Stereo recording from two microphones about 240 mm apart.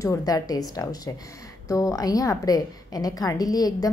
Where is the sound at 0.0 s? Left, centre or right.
Centre.